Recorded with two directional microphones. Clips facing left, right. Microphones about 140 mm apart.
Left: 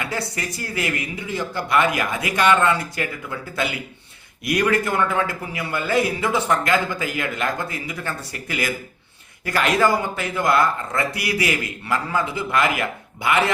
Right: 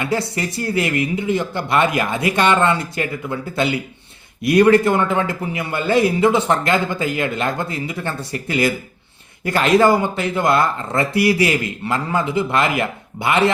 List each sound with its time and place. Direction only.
0.0 s a man's voice: 25° right (ahead or behind)